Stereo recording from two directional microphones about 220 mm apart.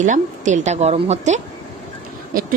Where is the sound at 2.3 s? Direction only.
40° right (ahead or behind).